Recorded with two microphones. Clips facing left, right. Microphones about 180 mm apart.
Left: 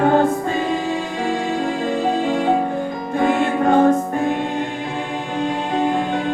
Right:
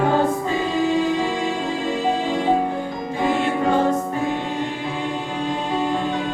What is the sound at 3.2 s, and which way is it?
Music, 55° left (ahead or behind).